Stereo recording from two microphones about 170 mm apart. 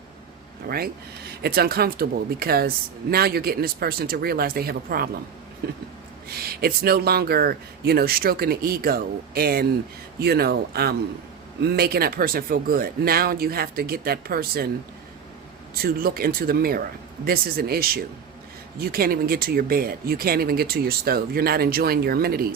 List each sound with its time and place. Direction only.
1.4 s speech: 65° right (ahead or behind)
15.7 s speech: 60° right (ahead or behind)